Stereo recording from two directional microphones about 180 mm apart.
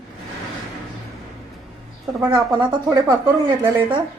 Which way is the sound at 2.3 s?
20° right (ahead or behind).